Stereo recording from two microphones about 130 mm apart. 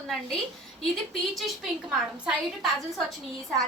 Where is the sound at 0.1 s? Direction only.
Centre (ahead or behind).